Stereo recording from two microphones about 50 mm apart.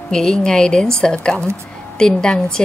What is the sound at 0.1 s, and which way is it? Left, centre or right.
A woman's voice, centre.